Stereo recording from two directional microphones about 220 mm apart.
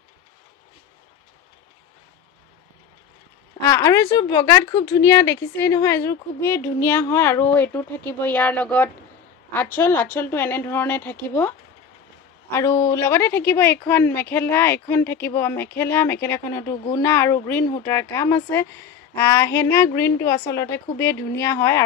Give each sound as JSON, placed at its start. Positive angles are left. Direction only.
{"t": 3.6, "sound": "speech", "side_deg": 15}